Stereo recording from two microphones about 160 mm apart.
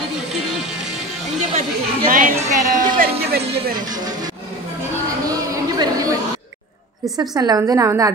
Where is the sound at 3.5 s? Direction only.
80° right.